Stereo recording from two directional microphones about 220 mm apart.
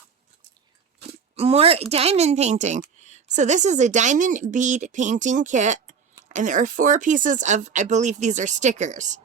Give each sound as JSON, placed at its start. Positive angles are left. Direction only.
{"t": 1.4, "sound": "a woman's voice", "side_deg": -25}